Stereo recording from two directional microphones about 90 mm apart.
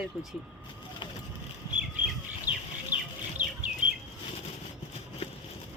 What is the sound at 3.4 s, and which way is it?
Chicken, 20° right (ahead or behind).